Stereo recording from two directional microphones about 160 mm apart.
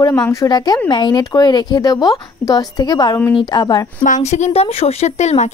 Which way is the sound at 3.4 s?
25° left (ahead or behind).